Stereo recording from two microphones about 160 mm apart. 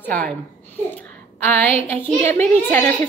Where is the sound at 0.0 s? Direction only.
10° left (ahead or behind).